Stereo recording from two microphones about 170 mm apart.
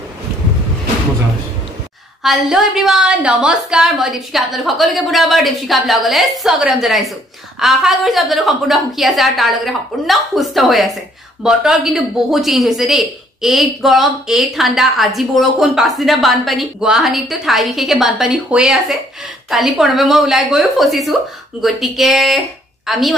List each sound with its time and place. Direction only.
2.2 s a woman's voice: centre (ahead or behind)